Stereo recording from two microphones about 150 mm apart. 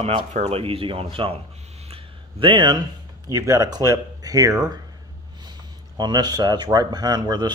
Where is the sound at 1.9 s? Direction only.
35° right (ahead or behind).